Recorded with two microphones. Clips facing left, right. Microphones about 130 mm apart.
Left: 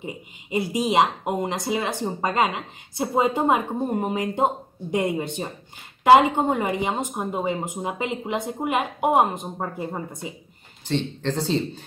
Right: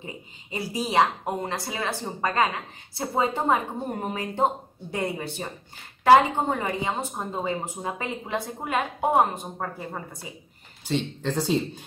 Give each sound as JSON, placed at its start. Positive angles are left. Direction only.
{"t": 0.0, "sound": "a woman's voice", "side_deg": 20}
{"t": 10.9, "sound": "speech", "side_deg": -10}